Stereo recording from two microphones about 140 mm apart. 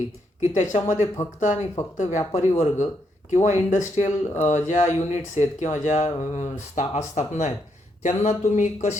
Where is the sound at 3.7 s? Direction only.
55° left (ahead or behind).